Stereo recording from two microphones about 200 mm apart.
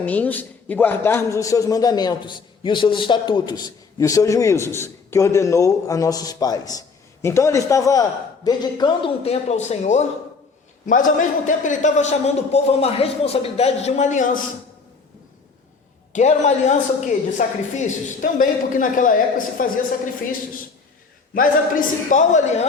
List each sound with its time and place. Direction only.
0.0 s a man's voice: 10° left (ahead or behind); by 14.3 s 35° left (ahead or behind)
16.1 s a man's voice: 35° left (ahead or behind)
21.3 s a man's voice: 40° left (ahead or behind)